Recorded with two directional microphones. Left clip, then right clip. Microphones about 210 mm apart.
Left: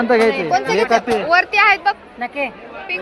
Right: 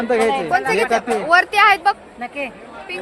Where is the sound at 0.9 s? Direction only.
25° right (ahead or behind).